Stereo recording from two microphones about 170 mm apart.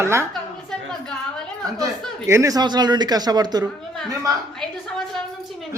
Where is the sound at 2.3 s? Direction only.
20° right (ahead or behind).